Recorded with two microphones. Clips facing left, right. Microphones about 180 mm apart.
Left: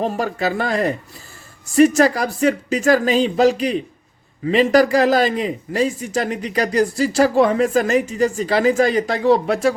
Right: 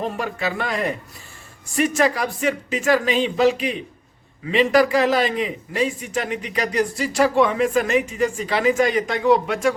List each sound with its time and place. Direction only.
0.0 s speech: 40° left (ahead or behind)